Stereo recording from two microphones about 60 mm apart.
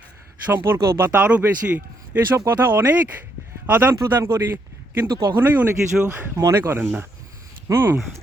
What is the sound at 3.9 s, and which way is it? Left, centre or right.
Speech, right.